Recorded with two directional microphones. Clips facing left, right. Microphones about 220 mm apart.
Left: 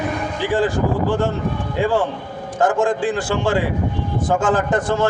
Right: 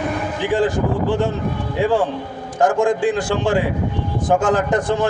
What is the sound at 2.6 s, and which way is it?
A man's voice, 15° right (ahead or behind).